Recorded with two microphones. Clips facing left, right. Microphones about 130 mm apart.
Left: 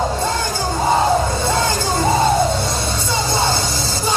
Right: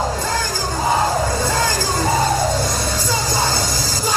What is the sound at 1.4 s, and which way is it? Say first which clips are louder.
Music: left 1 dB; 25° left (ahead or behind).